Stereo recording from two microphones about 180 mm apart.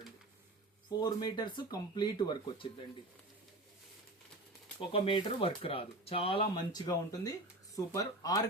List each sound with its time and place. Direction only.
0.9 s speech: 20° left (ahead or behind)
4.8 s speech: 30° left (ahead or behind)